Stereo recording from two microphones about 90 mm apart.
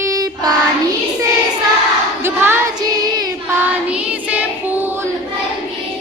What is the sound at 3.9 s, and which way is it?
Child singing, 15° right (ahead or behind).